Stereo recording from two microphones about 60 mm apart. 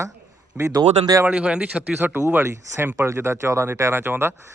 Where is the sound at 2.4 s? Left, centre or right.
Right.